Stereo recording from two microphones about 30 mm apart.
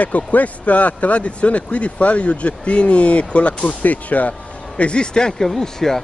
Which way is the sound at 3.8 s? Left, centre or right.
Left.